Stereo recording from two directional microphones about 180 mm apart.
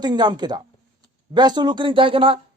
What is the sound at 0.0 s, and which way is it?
Speech, 25° right (ahead or behind).